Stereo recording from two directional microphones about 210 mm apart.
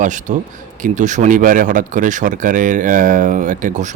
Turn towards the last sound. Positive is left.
turn(degrees=-35)  # may be behind; listen again after turning